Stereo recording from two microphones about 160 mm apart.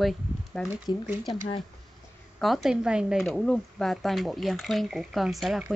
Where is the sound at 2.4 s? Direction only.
Centre (ahead or behind).